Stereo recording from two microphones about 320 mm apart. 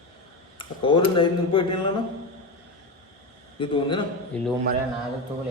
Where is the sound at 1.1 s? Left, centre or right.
Centre.